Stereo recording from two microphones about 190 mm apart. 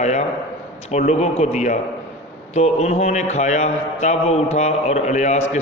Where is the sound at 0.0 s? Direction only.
40° left (ahead or behind).